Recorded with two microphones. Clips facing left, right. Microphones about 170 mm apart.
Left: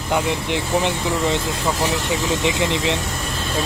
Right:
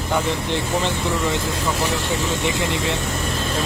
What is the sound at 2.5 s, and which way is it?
Speech, 20° left (ahead or behind).